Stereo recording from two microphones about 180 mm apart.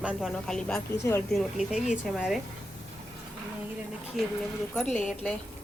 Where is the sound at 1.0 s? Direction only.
15° left (ahead or behind).